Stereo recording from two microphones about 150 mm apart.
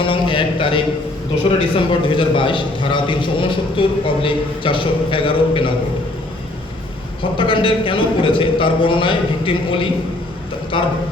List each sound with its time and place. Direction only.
0.0 s a man's voice: 35° left (ahead or behind)
7.3 s a man's voice: 35° left (ahead or behind)